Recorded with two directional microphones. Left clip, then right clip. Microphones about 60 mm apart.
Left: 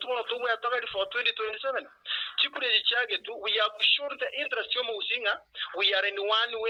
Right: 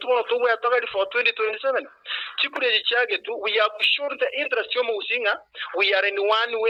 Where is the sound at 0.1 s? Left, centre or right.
Right.